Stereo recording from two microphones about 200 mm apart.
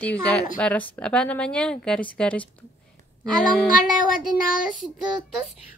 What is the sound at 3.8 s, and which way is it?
Child singing, 40° left (ahead or behind).